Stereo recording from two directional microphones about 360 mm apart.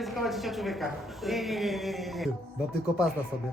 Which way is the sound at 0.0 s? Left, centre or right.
Centre.